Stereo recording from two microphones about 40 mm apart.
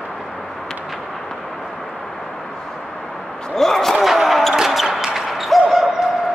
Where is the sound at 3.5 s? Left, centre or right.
Centre.